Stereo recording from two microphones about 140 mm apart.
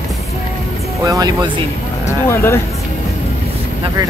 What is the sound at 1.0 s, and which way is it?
Speech, 30° right (ahead or behind).